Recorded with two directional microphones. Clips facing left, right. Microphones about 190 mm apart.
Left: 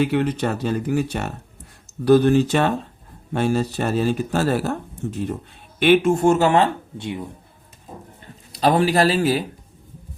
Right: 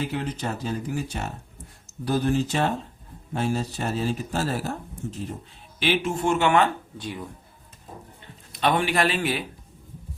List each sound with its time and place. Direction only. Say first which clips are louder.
0.0 s speech: left 9 dB; 70° left (ahead or behind)
5.8 s speech: left 9 dB; 55° left (ahead or behind); by 7.3 s 25° left (ahead or behind)
8.2 s speech: left 5 dB; 35° left (ahead or behind)